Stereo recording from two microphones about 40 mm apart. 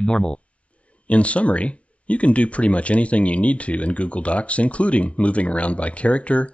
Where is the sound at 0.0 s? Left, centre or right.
Left.